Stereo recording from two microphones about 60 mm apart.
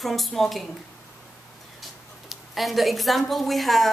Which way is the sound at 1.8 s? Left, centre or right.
Centre.